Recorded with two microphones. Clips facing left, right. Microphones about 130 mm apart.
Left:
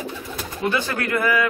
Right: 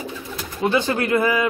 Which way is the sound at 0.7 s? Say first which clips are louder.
Right 4 dB; 20° right (ahead or behind).